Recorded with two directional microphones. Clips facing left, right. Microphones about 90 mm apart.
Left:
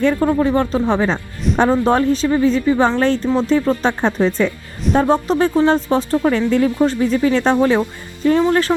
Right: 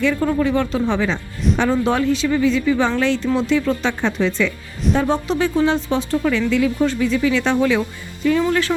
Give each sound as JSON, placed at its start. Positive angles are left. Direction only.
{"t": 0.0, "sound": "speech", "side_deg": 35}